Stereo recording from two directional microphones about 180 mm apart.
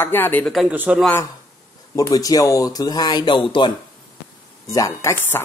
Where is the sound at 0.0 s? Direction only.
10° left (ahead or behind); by 1.0 s 5° right (ahead or behind).